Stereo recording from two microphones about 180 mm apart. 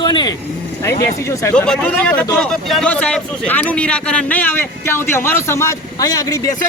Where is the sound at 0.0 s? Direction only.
25° left (ahead or behind).